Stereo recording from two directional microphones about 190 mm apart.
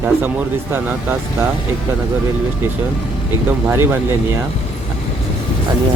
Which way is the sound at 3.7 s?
10° right (ahead or behind).